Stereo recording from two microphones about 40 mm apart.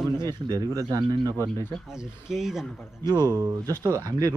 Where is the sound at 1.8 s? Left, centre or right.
Centre.